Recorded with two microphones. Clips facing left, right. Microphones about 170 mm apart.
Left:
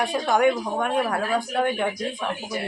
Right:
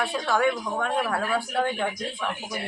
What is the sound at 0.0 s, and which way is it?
Speech, 15° left (ahead or behind).